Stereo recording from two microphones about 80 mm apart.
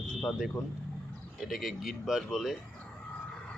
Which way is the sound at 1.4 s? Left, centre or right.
Centre.